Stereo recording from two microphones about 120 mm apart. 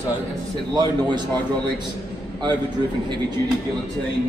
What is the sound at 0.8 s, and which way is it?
Speech, 40° right (ahead or behind).